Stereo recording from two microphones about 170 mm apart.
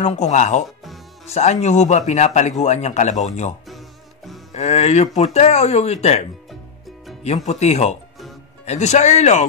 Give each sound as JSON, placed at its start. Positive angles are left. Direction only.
{"t": 0.0, "sound": "speech", "side_deg": 45}
{"t": 7.4, "sound": "speech", "side_deg": 40}